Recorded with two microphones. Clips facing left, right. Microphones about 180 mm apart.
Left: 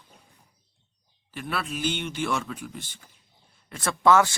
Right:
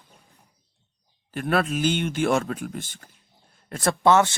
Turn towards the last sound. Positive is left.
turn(degrees=-25)  # may be behind; listen again after turning